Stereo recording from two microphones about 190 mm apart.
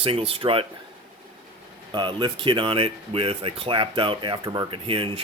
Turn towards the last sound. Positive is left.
turn(degrees=-30)  # may be behind; listen again after turning